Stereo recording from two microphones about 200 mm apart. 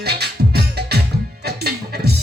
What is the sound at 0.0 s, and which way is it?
Music, 55° right (ahead or behind).